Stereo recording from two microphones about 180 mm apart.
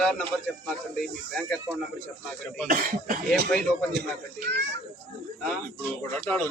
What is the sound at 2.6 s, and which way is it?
Speech, 50° right (ahead or behind).